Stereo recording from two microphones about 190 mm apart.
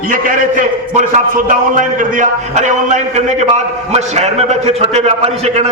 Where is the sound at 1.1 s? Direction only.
45° right (ahead or behind).